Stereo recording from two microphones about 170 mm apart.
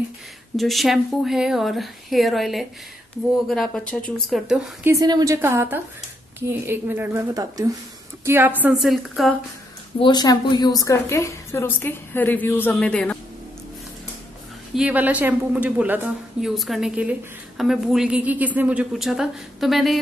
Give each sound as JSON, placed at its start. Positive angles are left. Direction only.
{"t": 0.6, "sound": "a woman's voice", "side_deg": 0}
{"t": 4.8, "sound": "a woman's voice", "side_deg": -20}
{"t": 9.9, "sound": "a woman's voice", "side_deg": 25}
{"t": 14.8, "sound": "a woman's voice", "side_deg": -10}